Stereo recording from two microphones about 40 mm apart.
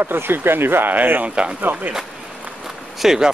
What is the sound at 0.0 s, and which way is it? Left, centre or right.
Speech, right.